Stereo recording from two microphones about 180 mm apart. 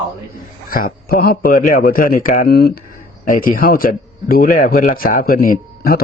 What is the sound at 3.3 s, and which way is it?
A man's voice, 50° left (ahead or behind).